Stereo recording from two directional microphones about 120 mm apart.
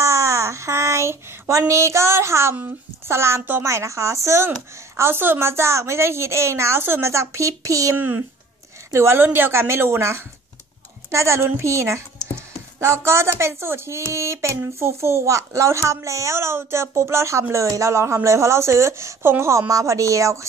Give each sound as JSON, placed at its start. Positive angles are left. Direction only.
{"t": 0.0, "sound": "child singing", "side_deg": -25}
{"t": 2.5, "sound": "speech", "side_deg": -20}